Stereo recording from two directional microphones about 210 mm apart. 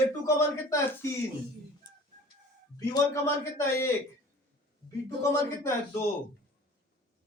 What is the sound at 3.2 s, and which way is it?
Speech, 15° left (ahead or behind).